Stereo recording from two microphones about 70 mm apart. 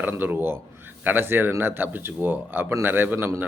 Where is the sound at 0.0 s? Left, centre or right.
Right.